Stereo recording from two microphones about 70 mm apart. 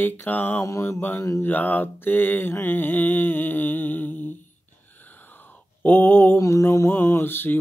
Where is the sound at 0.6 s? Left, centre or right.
Left.